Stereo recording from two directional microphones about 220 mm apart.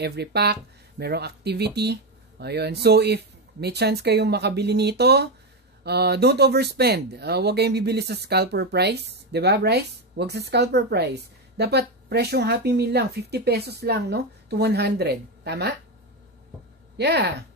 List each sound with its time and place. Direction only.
0.0 s speech: 50° right (ahead or behind)
16.9 s speech: 50° right (ahead or behind)